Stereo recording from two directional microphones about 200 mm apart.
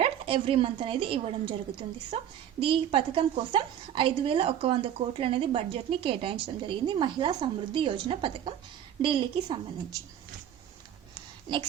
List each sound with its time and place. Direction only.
0.0 s a woman's voice: 25° right (ahead or behind)